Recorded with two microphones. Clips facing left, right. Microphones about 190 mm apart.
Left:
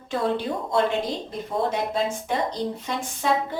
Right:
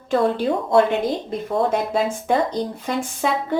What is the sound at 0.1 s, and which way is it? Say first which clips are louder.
A woman's voice: right 6 dB; 65° right (ahead or behind).